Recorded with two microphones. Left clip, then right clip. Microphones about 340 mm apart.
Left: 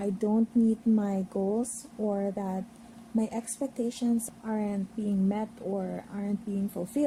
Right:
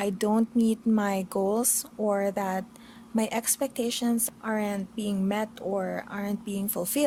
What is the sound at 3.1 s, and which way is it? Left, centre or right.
Speech, right.